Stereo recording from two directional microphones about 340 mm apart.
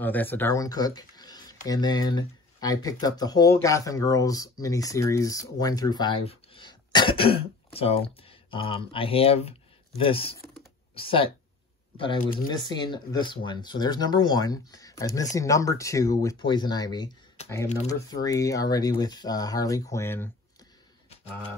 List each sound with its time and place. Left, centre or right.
0.0 s speech: centre